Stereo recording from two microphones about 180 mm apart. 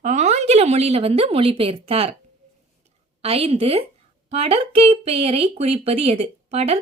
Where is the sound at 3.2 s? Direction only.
35° right (ahead or behind).